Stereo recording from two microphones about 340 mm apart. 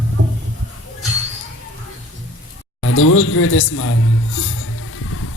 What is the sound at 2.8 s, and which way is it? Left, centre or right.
A man's voice, left.